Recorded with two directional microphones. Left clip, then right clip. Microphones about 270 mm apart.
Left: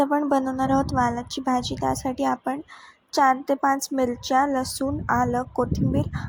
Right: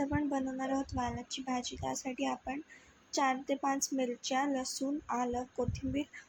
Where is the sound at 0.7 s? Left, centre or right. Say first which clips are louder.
Left 15 dB; left.